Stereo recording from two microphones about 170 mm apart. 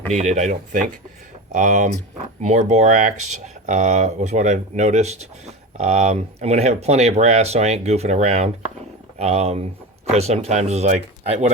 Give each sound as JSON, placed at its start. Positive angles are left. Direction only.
{"t": 0.1, "sound": "speech", "side_deg": -45}